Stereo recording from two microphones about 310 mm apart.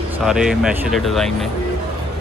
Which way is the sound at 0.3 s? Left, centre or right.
Centre.